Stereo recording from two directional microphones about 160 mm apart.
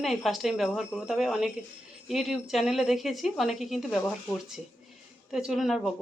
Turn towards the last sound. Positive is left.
turn(degrees=0)  # may be behind; listen again after turning